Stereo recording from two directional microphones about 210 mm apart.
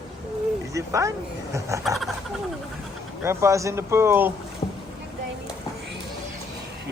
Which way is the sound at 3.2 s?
15° right (ahead or behind).